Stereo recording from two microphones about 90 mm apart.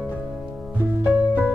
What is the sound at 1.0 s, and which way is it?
Music, 15° right (ahead or behind).